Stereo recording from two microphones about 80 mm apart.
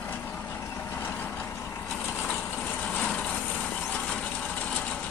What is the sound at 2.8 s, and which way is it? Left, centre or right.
Vehicle, centre.